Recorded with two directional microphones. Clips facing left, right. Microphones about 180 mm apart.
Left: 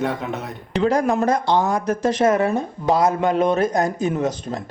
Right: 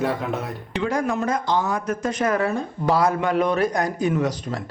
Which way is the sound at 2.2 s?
25° left (ahead or behind).